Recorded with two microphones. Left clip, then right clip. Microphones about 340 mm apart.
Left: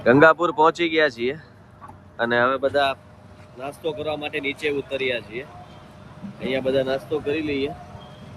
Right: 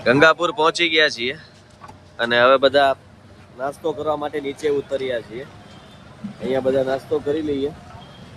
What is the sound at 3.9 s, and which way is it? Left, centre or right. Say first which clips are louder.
Speech: right 3 dB; centre.